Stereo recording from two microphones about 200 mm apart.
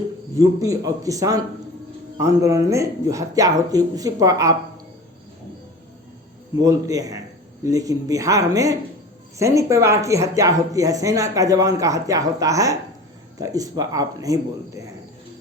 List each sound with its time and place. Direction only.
0.3 s speech: 15° right (ahead or behind)
6.6 s speech: 15° right (ahead or behind)